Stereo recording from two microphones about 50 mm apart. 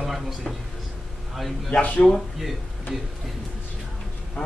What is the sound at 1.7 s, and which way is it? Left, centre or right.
Speech, left.